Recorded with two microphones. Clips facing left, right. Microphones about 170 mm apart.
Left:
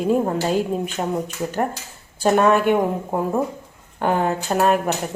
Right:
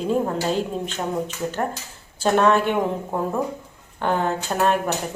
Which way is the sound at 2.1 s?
10° left (ahead or behind).